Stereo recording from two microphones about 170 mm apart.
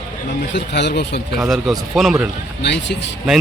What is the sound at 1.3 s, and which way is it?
Speech, centre (ahead or behind).